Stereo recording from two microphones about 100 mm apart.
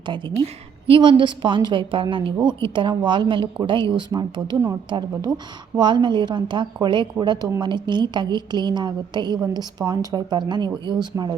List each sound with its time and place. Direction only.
0.0 s a woman's voice: 50° right (ahead or behind)
0.4 s a woman's voice: 65° right (ahead or behind); by 11.3 s 45° right (ahead or behind)